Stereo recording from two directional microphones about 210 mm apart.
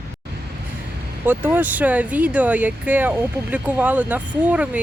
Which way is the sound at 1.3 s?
10° right (ahead or behind).